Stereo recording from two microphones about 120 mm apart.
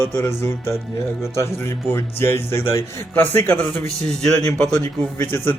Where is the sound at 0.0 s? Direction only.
20° left (ahead or behind).